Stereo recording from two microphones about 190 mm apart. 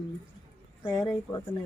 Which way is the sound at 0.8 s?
20° left (ahead or behind).